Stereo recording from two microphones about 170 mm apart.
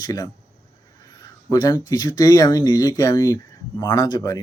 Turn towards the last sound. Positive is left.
turn(degrees=20)  # may be behind; listen again after turning